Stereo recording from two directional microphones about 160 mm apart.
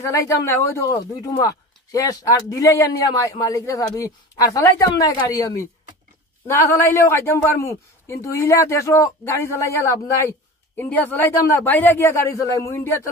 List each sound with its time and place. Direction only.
0.0 s a man's voice: 20° left (ahead or behind)